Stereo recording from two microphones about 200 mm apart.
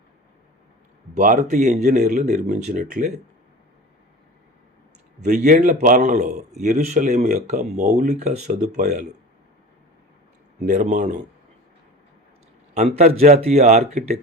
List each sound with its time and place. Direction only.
1.1 s speech: 40° right (ahead or behind)
5.2 s speech: 35° right (ahead or behind)
10.7 s speech: 40° right (ahead or behind)
12.7 s speech: 35° right (ahead or behind)